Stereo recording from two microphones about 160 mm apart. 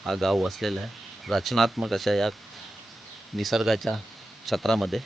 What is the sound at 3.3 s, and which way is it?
Speech, centre (ahead or behind).